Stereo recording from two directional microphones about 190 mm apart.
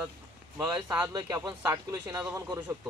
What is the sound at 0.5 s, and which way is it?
Speech, 10° right (ahead or behind).